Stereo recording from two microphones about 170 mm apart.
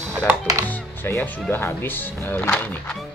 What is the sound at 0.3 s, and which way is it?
Speech, 20° right (ahead or behind).